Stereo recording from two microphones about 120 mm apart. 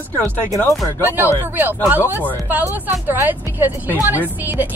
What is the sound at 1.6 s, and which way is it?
A woman's voice, 15° right (ahead or behind).